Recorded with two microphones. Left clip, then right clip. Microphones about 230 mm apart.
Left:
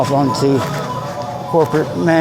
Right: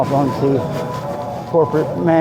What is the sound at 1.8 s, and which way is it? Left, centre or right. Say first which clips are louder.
Speech: left 1 dB; left.